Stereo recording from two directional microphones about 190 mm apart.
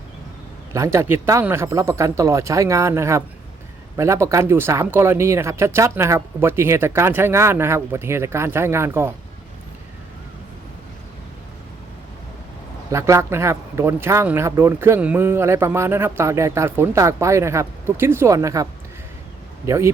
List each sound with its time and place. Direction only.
0.7 s a man's voice: 15° right (ahead or behind)
12.9 s a man's voice: 15° right (ahead or behind)